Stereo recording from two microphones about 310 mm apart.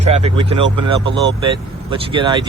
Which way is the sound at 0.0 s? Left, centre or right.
Centre.